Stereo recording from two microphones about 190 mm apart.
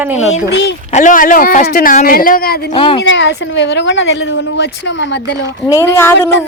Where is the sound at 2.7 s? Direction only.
30° left (ahead or behind).